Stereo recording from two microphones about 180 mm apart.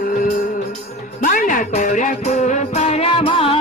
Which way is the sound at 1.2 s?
45° left (ahead or behind).